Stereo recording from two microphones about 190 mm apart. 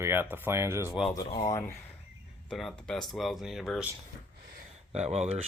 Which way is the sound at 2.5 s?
Centre (ahead or behind).